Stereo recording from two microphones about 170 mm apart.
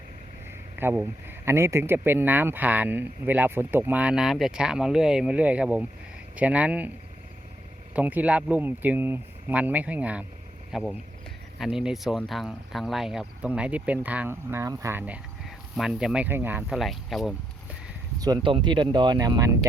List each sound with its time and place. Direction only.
0.8 s speech: 15° right (ahead or behind)
7.9 s speech: 10° right (ahead or behind)
18.2 s speech: 20° right (ahead or behind)